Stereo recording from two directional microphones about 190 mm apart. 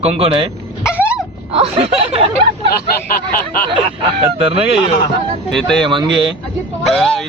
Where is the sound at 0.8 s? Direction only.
10° left (ahead or behind).